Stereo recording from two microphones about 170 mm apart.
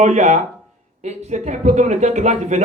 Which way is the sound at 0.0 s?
45° right (ahead or behind).